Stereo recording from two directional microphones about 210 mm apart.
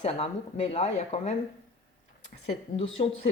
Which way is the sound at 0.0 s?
30° left (ahead or behind).